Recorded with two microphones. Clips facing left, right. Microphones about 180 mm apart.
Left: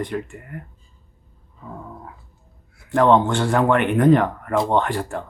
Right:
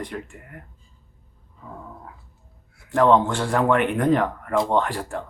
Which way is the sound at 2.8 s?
5° right (ahead or behind).